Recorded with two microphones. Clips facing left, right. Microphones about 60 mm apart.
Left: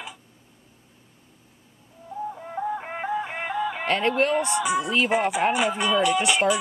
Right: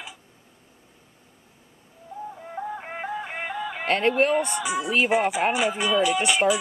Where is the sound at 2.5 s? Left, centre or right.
Centre.